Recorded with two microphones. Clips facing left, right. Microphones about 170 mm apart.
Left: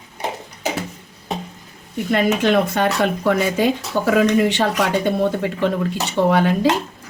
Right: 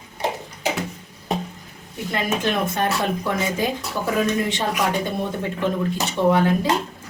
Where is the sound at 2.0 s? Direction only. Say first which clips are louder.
Left 6 dB; 75° left (ahead or behind).